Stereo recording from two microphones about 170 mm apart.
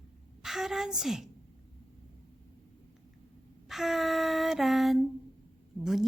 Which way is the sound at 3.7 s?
Centre (ahead or behind).